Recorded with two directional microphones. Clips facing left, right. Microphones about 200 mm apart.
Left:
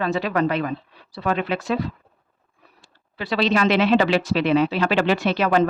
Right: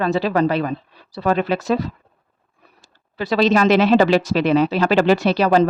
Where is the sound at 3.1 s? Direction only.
40° right (ahead or behind).